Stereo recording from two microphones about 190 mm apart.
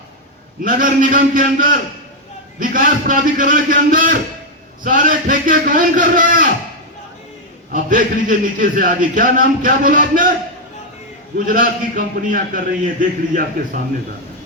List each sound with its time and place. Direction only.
0.6 s a man's voice: 45° right (ahead or behind)
7.7 s a man's voice: 45° right (ahead or behind)
11.3 s a man's voice: 45° right (ahead or behind)